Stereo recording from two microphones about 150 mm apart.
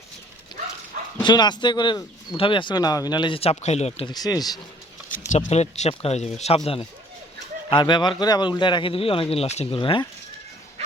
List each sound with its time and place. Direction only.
1.2 s speech: 30° left (ahead or behind)
4.1 s speech: 25° left (ahead or behind)
5.3 s speech: 50° left (ahead or behind)
7.7 s speech: 30° left (ahead or behind)